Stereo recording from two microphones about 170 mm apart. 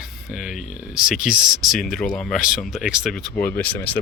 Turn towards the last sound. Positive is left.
turn(degrees=10)  # may be behind; listen again after turning